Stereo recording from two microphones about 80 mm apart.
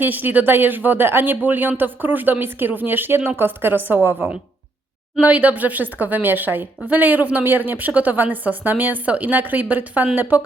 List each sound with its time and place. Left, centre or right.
0.0 s a woman's voice: right